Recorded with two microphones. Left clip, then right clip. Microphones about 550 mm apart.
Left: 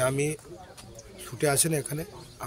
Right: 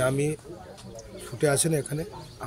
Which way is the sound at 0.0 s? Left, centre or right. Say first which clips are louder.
Right 1 dB; left.